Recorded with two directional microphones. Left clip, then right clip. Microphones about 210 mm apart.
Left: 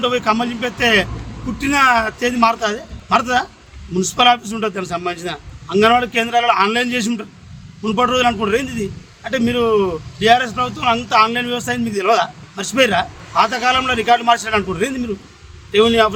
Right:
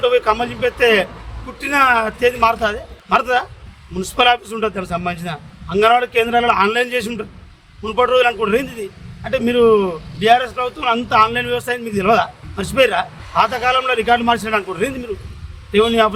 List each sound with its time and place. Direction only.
0.0 s a man's voice: 5° left (ahead or behind)